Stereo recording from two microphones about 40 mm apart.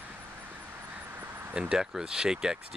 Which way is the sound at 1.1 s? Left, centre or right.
Right.